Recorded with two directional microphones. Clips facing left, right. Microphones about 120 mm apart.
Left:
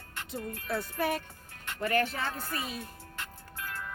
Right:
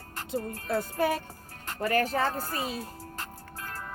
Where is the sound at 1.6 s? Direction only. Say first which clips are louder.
Right 2 dB; 40° right (ahead or behind).